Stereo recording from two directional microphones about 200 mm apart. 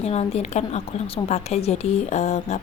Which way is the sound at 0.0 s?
30° left (ahead or behind).